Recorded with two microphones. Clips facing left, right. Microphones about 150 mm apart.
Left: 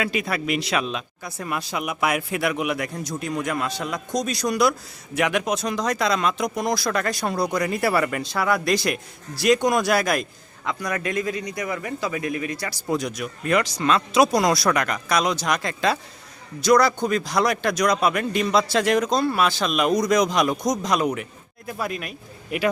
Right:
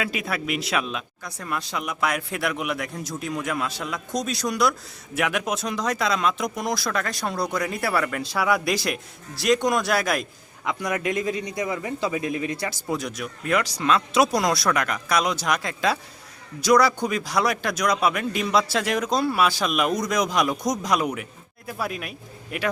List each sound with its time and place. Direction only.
0.0 s speech: centre (ahead or behind)
10.7 s a man's voice: 20° right (ahead or behind)
12.9 s speech: centre (ahead or behind)